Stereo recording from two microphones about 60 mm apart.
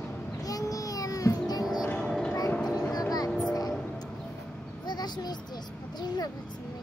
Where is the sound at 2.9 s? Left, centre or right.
Left.